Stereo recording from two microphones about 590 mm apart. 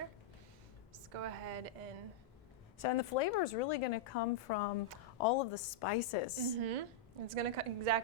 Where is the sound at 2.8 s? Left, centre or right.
Left.